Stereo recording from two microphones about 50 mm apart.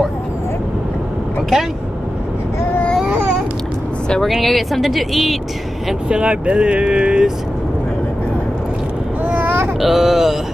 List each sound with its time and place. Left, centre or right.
4.3 s speech: centre
6.0 s speech: right
9.2 s a sound: right
9.8 s speech: centre